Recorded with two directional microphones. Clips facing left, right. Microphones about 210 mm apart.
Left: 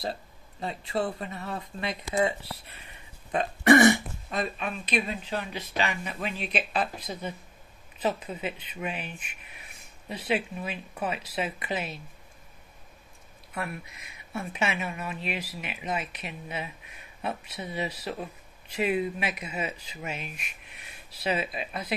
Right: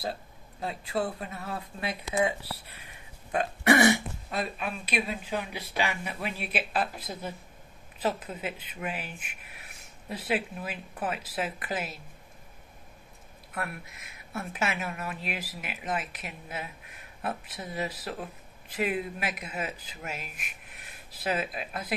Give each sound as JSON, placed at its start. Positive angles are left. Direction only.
{"t": 0.0, "sound": "speech", "side_deg": 0}
{"t": 8.7, "sound": "speech", "side_deg": -5}
{"t": 9.2, "sound": "speech", "side_deg": -60}
{"t": 10.2, "sound": "speech", "side_deg": -5}
{"t": 13.6, "sound": "speech", "side_deg": 0}